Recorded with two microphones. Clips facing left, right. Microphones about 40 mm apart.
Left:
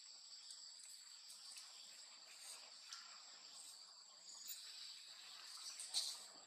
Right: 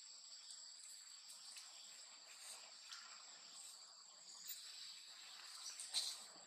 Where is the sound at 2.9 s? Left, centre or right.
Right.